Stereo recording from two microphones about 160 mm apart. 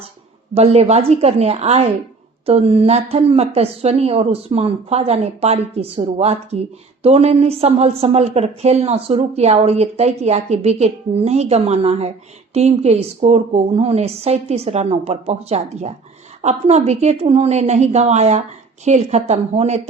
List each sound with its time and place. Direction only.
0.5 s a woman's voice: 40° right (ahead or behind)